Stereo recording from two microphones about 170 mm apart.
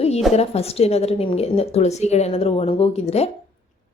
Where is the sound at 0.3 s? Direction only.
35° left (ahead or behind).